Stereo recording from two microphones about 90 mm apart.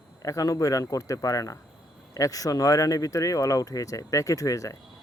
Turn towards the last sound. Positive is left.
turn(degrees=35)  # may be behind; listen again after turning